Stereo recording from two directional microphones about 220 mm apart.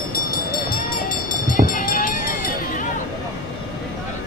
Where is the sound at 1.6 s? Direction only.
40° left (ahead or behind).